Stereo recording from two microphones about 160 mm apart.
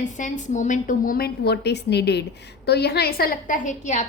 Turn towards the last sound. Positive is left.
turn(degrees=50)  # may be behind; listen again after turning